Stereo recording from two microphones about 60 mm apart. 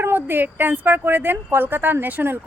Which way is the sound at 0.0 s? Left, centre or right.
Right.